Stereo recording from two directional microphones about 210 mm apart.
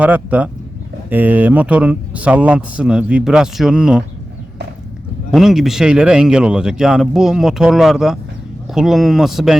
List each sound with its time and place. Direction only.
0.0 s speech: 5° right (ahead or behind)
5.3 s speech: centre (ahead or behind)